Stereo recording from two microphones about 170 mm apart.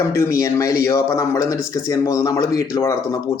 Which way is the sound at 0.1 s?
15° left (ahead or behind).